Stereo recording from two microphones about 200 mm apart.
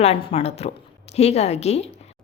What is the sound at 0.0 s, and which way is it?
A woman's voice, 30° left (ahead or behind).